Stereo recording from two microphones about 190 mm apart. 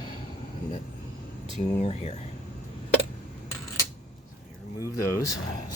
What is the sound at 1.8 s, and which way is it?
Speech, 35° left (ahead or behind).